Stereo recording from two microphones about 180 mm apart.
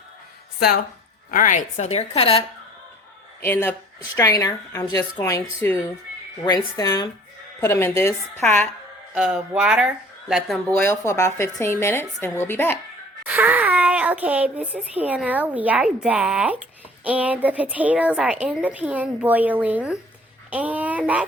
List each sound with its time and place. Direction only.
1.3 s a woman's voice: 45° left (ahead or behind)
3.4 s a woman's voice: 10° left (ahead or behind)
9.1 s a woman's voice: 5° right (ahead or behind); by 12.7 s 10° left (ahead or behind)
13.2 s a child's voice: 10° right (ahead or behind)